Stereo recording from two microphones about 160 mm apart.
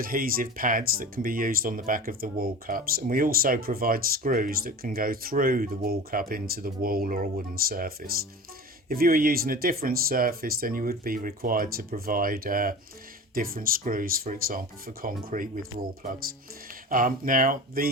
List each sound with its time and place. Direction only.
0.0 s speech: 65° right (ahead or behind)